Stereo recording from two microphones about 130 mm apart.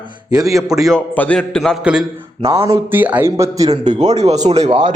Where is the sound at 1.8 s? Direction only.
5° right (ahead or behind).